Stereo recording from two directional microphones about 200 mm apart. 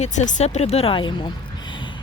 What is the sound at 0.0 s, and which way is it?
Speech, 35° left (ahead or behind).